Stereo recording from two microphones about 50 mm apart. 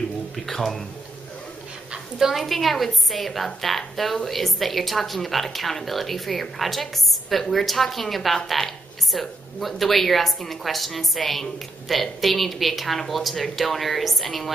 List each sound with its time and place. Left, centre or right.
0.5 s a woman's voice: centre
2.1 s a woman's voice: centre